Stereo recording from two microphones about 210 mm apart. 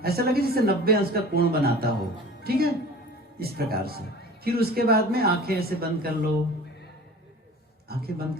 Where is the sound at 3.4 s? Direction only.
45° right (ahead or behind).